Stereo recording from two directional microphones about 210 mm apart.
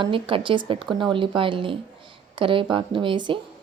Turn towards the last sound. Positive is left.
turn(degrees=-20)  # may be behind; listen again after turning